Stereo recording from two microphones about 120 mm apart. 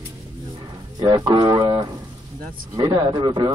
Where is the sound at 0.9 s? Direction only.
35° right (ahead or behind).